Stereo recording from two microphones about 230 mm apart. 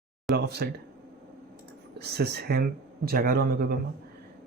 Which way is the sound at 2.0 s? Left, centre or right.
Right.